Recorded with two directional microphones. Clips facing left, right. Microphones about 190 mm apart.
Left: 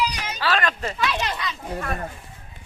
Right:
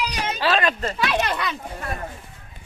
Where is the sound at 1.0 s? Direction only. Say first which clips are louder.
Right 3 dB; 60° right (ahead or behind).